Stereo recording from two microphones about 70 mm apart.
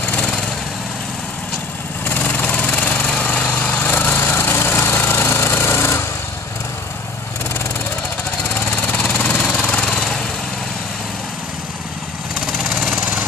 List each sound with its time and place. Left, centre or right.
0.0 s lawn mower: centre
2.0 s lawn mower: left
4.4 s a sound: left
8.5 s jackhammer: left
9.9 s lawn mower: centre
12.5 s vehicle: centre